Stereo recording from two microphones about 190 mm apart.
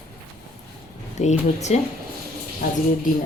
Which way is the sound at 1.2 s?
35° left (ahead or behind).